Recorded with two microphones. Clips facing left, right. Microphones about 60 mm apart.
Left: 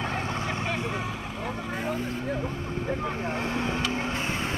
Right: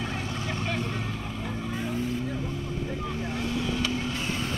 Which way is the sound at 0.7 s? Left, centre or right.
Centre.